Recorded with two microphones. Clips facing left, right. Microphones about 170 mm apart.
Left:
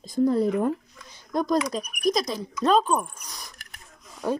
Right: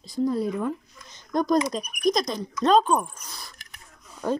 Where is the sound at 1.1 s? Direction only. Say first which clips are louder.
Right 2 dB; 5° left (ahead or behind).